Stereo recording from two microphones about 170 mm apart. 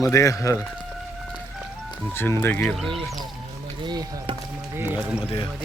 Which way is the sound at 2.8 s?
Centre (ahead or behind).